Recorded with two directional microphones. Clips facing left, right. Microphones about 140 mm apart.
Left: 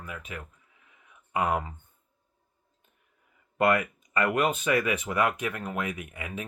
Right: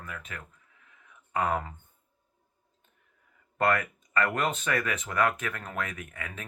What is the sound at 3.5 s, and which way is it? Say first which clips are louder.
Speech: left 2 dB; 10° left (ahead or behind).